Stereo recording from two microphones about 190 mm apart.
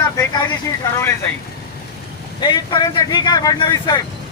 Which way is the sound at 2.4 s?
20° left (ahead or behind).